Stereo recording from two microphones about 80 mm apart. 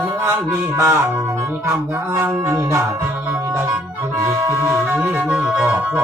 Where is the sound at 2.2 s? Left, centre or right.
Right.